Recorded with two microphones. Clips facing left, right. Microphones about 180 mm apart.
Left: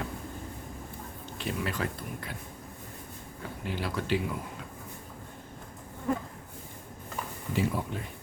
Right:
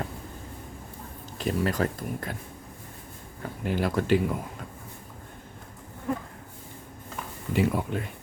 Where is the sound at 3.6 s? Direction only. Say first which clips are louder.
Right 7 dB; 50° right (ahead or behind).